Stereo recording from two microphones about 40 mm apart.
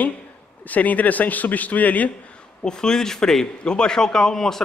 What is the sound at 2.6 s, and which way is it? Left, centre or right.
A man's voice, centre.